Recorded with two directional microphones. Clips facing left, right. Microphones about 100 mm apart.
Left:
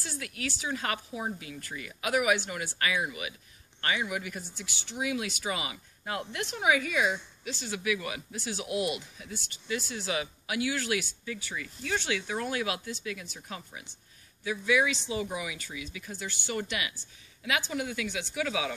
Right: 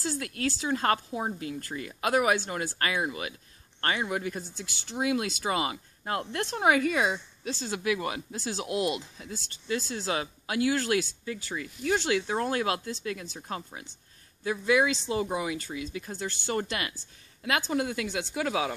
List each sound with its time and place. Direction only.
0.0 s speech: 35° right (ahead or behind)